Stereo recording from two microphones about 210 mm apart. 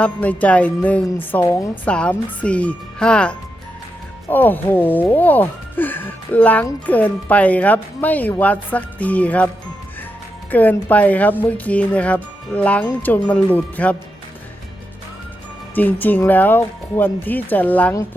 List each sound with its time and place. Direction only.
0.0 s speech: 5° left (ahead or behind)
10.5 s speech: 10° left (ahead or behind)
15.7 s speech: 10° left (ahead or behind)